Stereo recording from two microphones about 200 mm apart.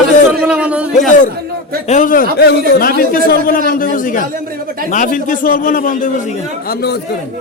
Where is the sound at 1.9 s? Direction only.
40° left (ahead or behind).